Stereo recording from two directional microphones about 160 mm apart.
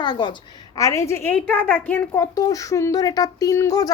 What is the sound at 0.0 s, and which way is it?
A woman's voice, 30° left (ahead or behind).